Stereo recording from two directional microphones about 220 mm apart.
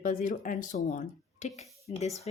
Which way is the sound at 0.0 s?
35° left (ahead or behind).